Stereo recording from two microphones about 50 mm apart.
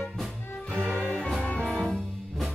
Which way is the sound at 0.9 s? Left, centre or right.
Left.